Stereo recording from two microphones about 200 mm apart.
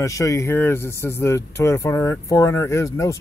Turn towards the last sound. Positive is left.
turn(degrees=15)  # may be behind; listen again after turning